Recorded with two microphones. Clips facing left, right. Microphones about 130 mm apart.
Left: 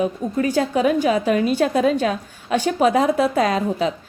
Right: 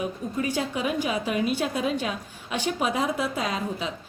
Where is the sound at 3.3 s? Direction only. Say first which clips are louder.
Left 9 dB; 65° left (ahead or behind).